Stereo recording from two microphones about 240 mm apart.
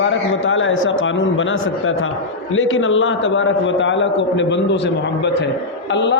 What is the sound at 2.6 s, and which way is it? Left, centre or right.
A man's voice, left.